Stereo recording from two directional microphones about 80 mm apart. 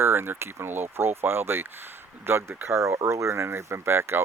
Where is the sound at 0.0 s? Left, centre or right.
Right.